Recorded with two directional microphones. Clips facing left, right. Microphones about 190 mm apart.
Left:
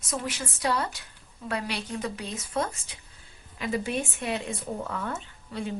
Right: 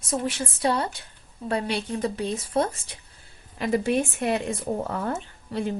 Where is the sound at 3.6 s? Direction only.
50° right (ahead or behind).